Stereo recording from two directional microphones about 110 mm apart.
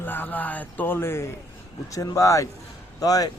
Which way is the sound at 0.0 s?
15° left (ahead or behind).